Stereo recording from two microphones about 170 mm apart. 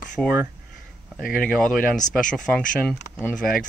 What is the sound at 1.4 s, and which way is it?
Speech, 5° left (ahead or behind).